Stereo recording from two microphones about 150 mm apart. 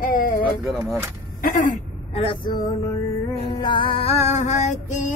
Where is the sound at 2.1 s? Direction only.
35° left (ahead or behind).